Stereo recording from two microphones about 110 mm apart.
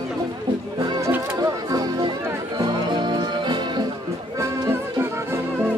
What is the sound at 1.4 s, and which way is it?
Music, 35° right (ahead or behind).